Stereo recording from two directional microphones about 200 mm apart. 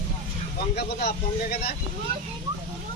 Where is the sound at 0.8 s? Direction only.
50° left (ahead or behind).